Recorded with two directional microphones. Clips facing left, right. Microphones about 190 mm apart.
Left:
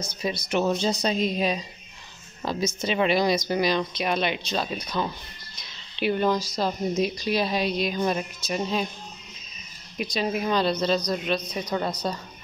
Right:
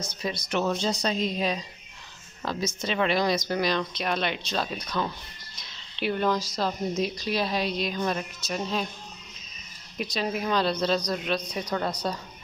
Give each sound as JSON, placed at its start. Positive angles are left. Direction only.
{"t": 0.0, "sound": "a woman's voice", "side_deg": 5}
{"t": 0.5, "sound": "a woman's voice", "side_deg": 15}
{"t": 4.8, "sound": "speech", "side_deg": 20}
{"t": 5.9, "sound": "a woman's voice", "side_deg": 5}
{"t": 9.9, "sound": "a woman's voice", "side_deg": 0}